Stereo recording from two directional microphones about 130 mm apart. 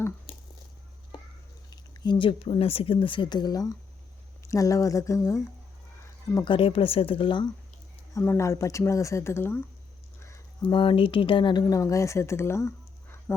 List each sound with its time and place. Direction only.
1.7 s speech: 35° left (ahead or behind)
6.4 s speech: 40° left (ahead or behind)
8.1 s speech: 20° left (ahead or behind)
10.2 s a sound: 20° left (ahead or behind)
10.6 s speech: 40° left (ahead or behind); by 13.3 s 20° left (ahead or behind)